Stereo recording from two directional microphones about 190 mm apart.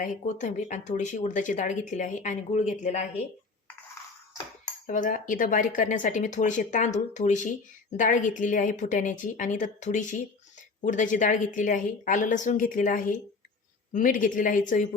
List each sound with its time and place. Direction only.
0.0 s speech: 40° left (ahead or behind)
4.9 s speech: 45° left (ahead or behind)